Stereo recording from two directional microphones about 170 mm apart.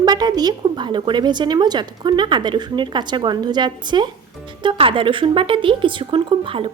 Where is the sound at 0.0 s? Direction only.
25° right (ahead or behind).